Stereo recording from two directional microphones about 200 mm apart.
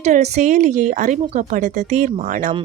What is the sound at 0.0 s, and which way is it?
A woman's voice, 35° right (ahead or behind).